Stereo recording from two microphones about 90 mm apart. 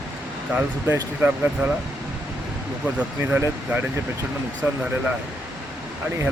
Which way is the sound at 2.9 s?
20° right (ahead or behind).